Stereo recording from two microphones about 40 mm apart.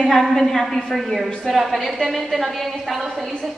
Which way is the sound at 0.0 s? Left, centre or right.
Centre.